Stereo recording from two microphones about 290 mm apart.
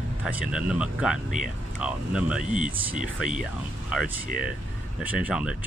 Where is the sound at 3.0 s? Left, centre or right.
Left.